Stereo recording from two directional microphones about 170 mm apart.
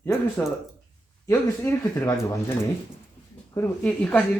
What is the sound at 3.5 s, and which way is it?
Speech, 10° left (ahead or behind).